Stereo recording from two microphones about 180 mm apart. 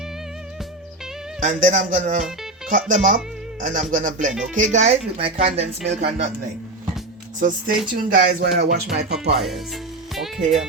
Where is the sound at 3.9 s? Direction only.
50° right (ahead or behind).